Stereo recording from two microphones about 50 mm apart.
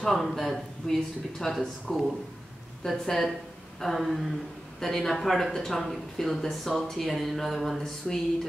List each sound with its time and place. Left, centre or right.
0.0 s speech: centre
2.8 s speech: centre